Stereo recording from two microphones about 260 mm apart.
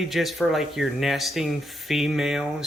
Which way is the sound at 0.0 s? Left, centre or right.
Centre.